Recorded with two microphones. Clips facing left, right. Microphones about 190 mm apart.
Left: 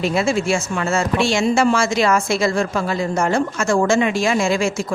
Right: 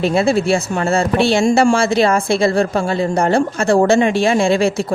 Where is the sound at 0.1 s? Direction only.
35° right (ahead or behind).